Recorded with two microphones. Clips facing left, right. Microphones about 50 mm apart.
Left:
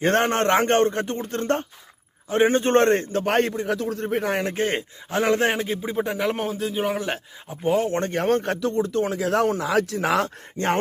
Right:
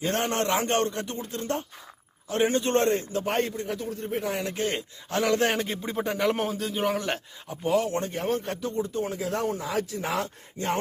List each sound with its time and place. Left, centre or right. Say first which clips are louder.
0.0 s a man's voice: left 7 dB; left
2.3 s a man's voice: left 5 dB; left
3.3 s a man's voice: left 6 dB; left
5.5 s speech: left 4 dB; centre
7.4 s speech: left 3 dB; left
8.0 s speech: left 6 dB; left